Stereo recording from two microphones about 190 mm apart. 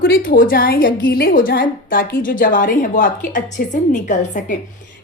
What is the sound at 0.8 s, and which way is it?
A woman's voice, 60° left (ahead or behind).